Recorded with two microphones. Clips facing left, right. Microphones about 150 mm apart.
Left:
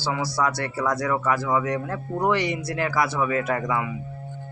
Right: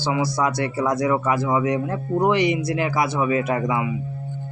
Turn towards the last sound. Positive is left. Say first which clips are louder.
# right 3 dB
turn(degrees=-20)  # may be behind; listen again after turning